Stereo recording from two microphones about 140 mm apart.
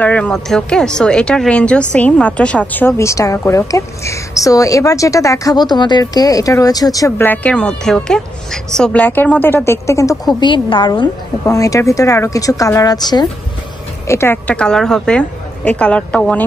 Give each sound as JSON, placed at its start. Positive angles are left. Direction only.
{"t": 0.0, "sound": "speech", "side_deg": 10}
{"t": 10.4, "sound": "a woman's voice", "side_deg": 35}
{"t": 14.0, "sound": "speech", "side_deg": 20}